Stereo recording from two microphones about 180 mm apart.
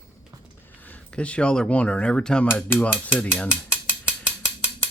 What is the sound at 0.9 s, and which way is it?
Speech, 5° left (ahead or behind).